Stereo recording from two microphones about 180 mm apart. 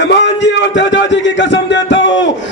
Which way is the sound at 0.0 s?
80° left.